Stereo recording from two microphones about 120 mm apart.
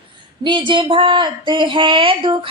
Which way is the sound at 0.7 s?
45° right (ahead or behind).